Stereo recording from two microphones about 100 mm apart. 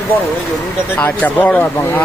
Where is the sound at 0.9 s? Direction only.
15° left (ahead or behind).